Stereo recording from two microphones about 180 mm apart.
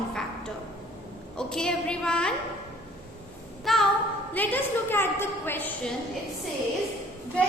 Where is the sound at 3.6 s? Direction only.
Centre (ahead or behind).